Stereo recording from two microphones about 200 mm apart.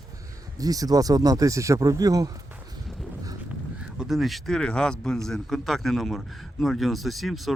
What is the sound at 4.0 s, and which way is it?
Speech, centre (ahead or behind).